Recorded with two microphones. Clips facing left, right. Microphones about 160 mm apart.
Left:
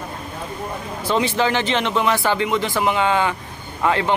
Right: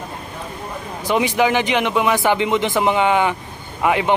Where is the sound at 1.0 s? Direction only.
15° right (ahead or behind).